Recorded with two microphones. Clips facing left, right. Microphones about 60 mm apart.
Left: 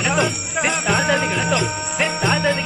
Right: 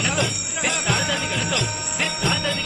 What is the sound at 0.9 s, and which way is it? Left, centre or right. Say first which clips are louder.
Music: left 6 dB; left.